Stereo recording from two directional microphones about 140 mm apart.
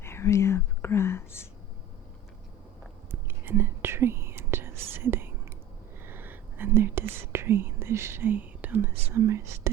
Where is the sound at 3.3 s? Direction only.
15° right (ahead or behind).